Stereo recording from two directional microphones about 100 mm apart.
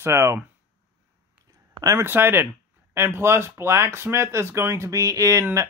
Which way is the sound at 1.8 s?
25° right (ahead or behind).